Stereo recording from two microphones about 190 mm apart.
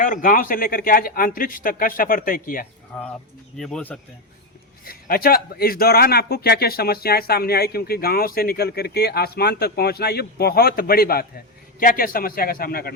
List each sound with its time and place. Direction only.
0.0 s a man's voice: 45° left (ahead or behind)
2.9 s speech: 5° left (ahead or behind)
4.9 s a man's voice: 50° left (ahead or behind)